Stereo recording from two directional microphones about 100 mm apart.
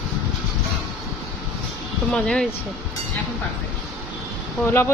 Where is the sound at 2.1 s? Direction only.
10° left (ahead or behind).